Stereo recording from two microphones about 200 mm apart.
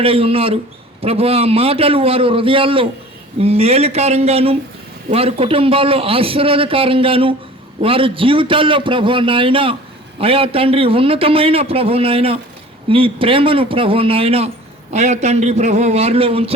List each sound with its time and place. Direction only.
0.0 s a man's voice: 30° right (ahead or behind)